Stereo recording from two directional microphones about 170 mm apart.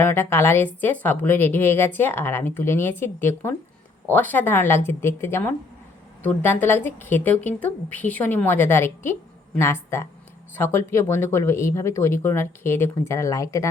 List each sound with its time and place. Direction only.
0.0 s a woman's voice: 15° left (ahead or behind)